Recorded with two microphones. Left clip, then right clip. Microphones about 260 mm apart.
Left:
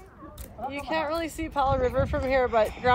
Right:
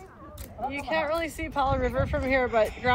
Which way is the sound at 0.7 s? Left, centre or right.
Centre.